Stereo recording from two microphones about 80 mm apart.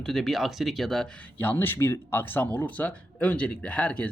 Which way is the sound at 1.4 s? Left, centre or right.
Left.